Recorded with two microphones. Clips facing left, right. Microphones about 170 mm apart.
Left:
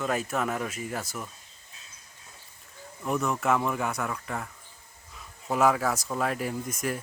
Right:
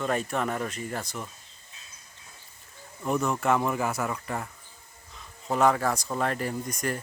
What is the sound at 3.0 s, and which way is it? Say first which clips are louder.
Speech: right 1 dB; centre (ahead or behind).